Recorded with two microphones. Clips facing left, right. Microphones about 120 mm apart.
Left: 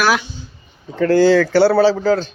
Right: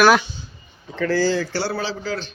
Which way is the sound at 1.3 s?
80° left.